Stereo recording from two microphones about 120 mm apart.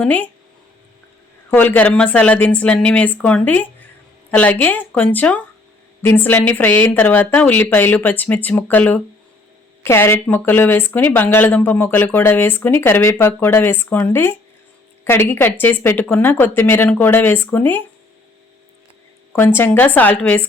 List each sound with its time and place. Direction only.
0.0 s speech: 15° left (ahead or behind)
1.5 s speech: 15° left (ahead or behind)
19.4 s speech: 20° left (ahead or behind)